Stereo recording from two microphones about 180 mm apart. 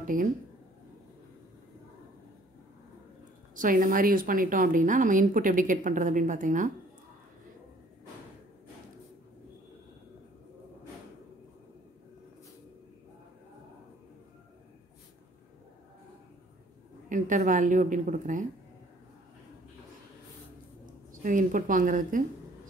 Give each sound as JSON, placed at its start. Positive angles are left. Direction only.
{"t": 0.0, "sound": "speech", "side_deg": -50}
{"t": 3.5, "sound": "speech", "side_deg": -50}
{"t": 17.1, "sound": "speech", "side_deg": -45}
{"t": 20.8, "sound": "a woman's voice", "side_deg": -45}